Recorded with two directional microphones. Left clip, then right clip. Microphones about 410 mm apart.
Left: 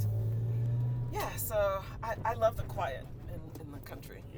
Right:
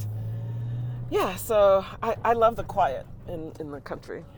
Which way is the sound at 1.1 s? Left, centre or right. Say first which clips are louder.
Right 11 dB; right.